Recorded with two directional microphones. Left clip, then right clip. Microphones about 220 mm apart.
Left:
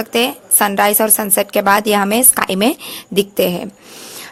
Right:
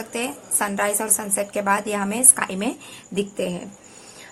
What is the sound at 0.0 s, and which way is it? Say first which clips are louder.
A woman's voice: left 12 dB; 40° left (ahead or behind).